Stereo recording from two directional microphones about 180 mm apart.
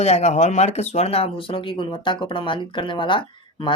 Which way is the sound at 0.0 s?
40° left (ahead or behind).